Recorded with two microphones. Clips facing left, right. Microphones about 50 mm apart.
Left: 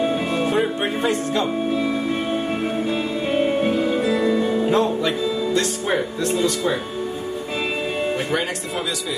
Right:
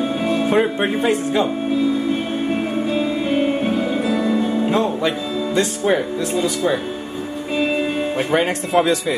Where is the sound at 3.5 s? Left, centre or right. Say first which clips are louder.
Even; centre.